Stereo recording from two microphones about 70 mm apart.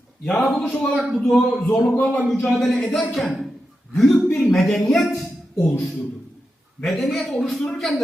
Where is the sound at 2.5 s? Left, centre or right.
Centre.